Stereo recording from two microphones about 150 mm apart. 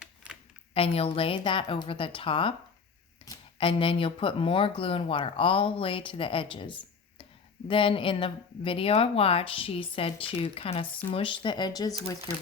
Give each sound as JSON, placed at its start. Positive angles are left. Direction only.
{"t": 0.7, "sound": "speech", "side_deg": 40}
{"t": 3.3, "sound": "a sound", "side_deg": 25}
{"t": 3.6, "sound": "speech", "side_deg": 35}